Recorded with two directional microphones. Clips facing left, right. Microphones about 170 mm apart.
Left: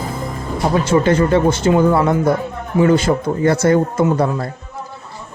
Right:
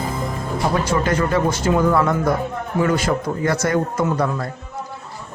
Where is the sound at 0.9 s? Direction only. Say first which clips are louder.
Left 6 dB; 25° left (ahead or behind).